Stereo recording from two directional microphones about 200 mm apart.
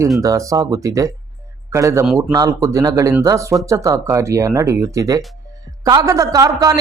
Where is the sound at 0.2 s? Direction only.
15° right (ahead or behind).